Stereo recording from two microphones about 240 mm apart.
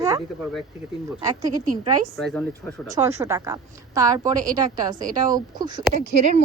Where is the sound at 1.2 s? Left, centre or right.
Centre.